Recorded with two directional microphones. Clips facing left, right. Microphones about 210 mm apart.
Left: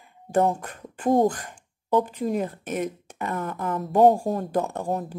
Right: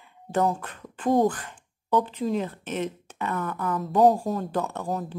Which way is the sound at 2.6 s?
10° left (ahead or behind).